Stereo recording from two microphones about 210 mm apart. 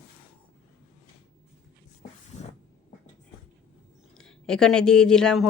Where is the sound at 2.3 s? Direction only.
35° left (ahead or behind).